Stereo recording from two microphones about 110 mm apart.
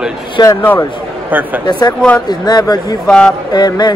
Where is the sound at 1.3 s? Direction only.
15° right (ahead or behind).